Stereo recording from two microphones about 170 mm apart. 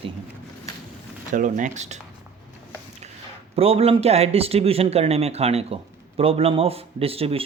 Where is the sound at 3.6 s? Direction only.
35° right (ahead or behind).